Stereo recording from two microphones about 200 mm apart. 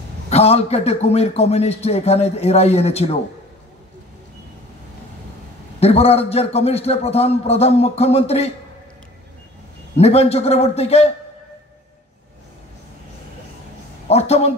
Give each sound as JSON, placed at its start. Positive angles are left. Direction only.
{"t": 0.3, "sound": "a man's voice", "side_deg": 30}
{"t": 5.8, "sound": "a man's voice", "side_deg": 30}
{"t": 9.9, "sound": "a man's voice", "side_deg": 30}
{"t": 14.0, "sound": "speech", "side_deg": 30}